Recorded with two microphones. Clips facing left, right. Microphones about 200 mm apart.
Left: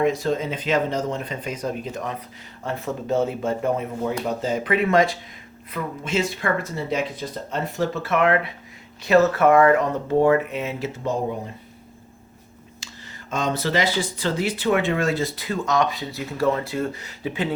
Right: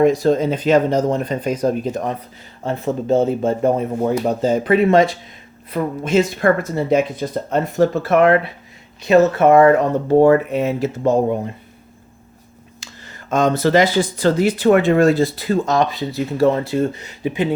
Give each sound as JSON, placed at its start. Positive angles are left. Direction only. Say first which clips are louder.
{"t": 0.2, "sound": "speech", "louder": "right 8 dB", "side_deg": -35}
{"t": 5.7, "sound": "speech", "louder": "right 8 dB", "side_deg": -40}
{"t": 8.0, "sound": "speech", "louder": "right 5 dB", "side_deg": -35}
{"t": 9.0, "sound": "speech", "louder": "right 4 dB", "side_deg": -20}
{"t": 12.8, "sound": "speech", "louder": "right 3 dB", "side_deg": -50}